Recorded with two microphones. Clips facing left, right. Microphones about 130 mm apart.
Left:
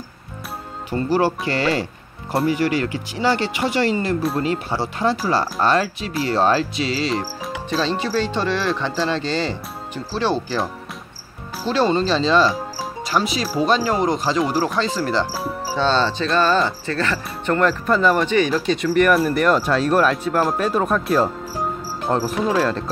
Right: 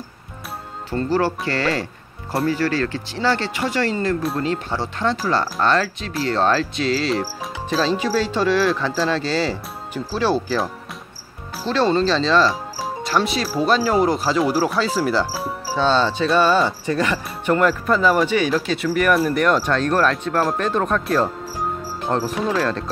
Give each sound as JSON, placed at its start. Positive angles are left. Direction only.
{"t": 0.8, "sound": "speech", "side_deg": 15}